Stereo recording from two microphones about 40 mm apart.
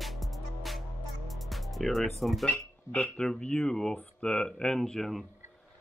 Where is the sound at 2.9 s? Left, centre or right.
Left.